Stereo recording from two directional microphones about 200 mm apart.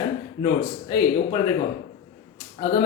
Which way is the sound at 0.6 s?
20° left (ahead or behind).